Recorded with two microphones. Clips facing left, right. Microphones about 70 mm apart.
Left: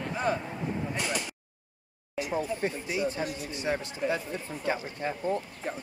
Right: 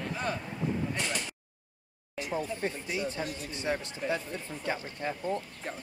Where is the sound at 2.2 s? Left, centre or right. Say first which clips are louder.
Left 3 dB; centre.